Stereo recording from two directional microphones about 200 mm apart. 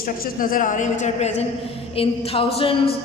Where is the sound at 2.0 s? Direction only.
25° left (ahead or behind).